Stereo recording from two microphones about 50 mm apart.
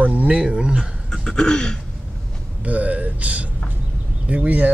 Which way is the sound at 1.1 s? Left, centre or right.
Centre.